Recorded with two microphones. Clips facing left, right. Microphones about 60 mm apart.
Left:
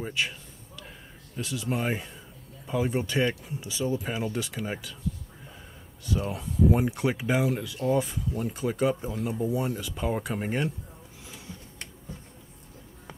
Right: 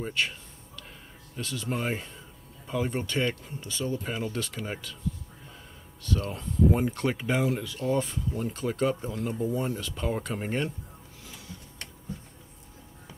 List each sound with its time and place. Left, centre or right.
0.0 s speech: centre
1.3 s speech: centre
6.0 s speech: centre
11.2 s printer: centre